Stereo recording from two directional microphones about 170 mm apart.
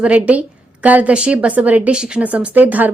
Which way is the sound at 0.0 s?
10° right (ahead or behind).